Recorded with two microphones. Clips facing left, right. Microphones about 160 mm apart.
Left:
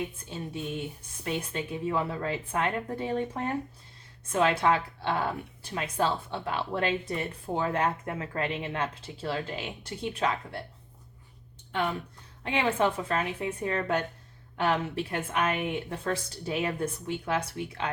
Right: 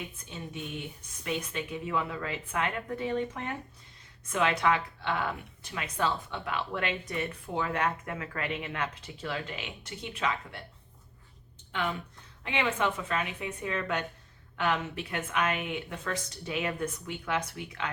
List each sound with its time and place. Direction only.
1.2 s speech: 30° left (ahead or behind)
11.7 s a woman's voice: 35° left (ahead or behind)